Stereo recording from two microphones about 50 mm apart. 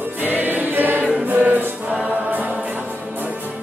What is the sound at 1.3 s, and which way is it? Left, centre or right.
Music, right.